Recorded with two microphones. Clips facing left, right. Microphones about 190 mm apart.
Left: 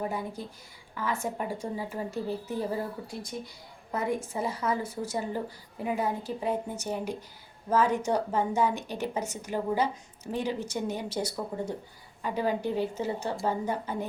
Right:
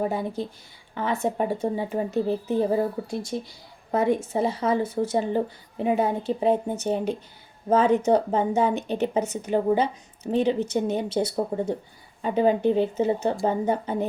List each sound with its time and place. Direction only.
0.0 s a woman's voice: 25° right (ahead or behind)
4.3 s a woman's voice: 25° right (ahead or behind)